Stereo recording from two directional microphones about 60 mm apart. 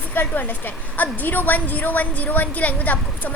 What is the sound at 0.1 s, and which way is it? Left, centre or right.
A woman's voice, left.